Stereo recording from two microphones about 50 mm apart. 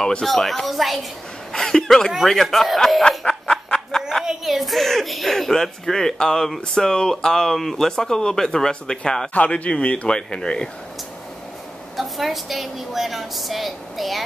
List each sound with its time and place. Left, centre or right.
0.0 s a woman's voice: centre
1.5 s a woman's voice: centre
3.0 s a sound: centre
4.5 s a woman's voice: centre; by 10.7 s left
12.0 s a woman's voice: centre